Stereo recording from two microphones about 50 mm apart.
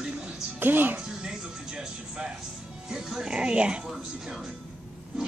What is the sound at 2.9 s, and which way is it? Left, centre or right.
Speech, centre.